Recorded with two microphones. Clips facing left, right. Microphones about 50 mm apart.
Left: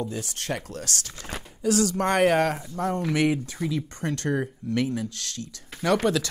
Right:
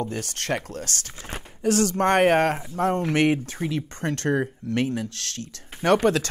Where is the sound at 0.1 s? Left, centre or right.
Right.